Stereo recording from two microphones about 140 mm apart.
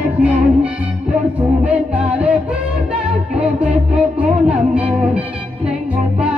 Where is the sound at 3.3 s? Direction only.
10° right (ahead or behind).